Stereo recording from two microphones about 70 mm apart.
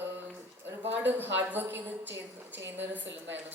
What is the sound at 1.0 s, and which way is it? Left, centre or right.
Speech, right.